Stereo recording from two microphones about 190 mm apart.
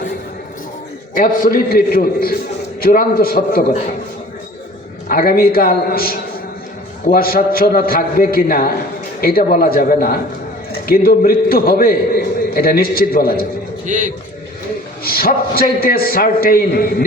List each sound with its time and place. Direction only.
1.1 s a man's voice: 45° left (ahead or behind)
5.0 s a man's voice: 50° left (ahead or behind)
13.8 s a man's voice: 40° right (ahead or behind)
15.0 s a man's voice: 50° left (ahead or behind)